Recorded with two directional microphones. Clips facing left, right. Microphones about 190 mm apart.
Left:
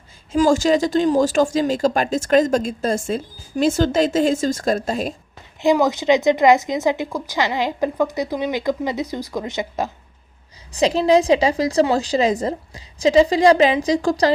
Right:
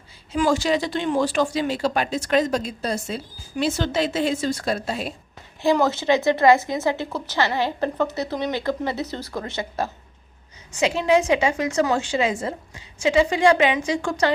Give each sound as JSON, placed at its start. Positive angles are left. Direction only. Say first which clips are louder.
{"t": 0.3, "sound": "speech", "louder": "left 5 dB", "side_deg": 45}
{"t": 5.7, "sound": "a woman's voice", "louder": "left 3 dB", "side_deg": 15}
{"t": 10.7, "sound": "a woman's voice", "louder": "left 4 dB", "side_deg": 35}